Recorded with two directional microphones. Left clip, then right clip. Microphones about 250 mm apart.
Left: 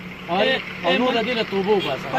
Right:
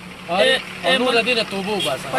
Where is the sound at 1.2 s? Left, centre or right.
Right.